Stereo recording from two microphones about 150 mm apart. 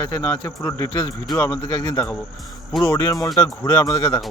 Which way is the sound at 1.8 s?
25° left (ahead or behind).